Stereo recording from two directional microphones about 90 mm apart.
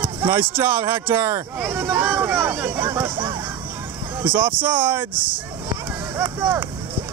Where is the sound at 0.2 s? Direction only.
25° right (ahead or behind).